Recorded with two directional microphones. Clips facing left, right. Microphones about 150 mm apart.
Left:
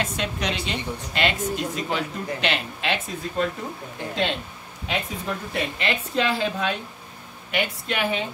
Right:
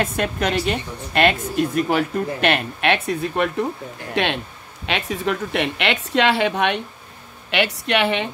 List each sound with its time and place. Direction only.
0.0 s a woman's voice: 55° right (ahead or behind); by 4.4 s 75° right (ahead or behind)
4.8 s a woman's voice: 85° right